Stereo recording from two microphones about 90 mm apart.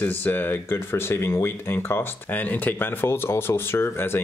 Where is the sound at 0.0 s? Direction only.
20° left (ahead or behind).